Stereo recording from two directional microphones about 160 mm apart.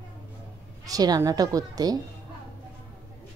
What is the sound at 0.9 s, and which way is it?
A woman's voice, 25° right (ahead or behind).